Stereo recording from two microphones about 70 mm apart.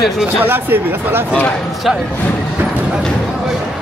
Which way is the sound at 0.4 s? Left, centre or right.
Right.